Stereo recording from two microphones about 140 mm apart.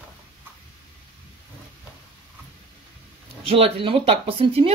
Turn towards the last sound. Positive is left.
turn(degrees=-45)  # may be behind; listen again after turning